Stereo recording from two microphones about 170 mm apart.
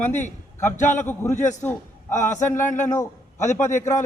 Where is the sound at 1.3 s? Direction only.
45° left (ahead or behind).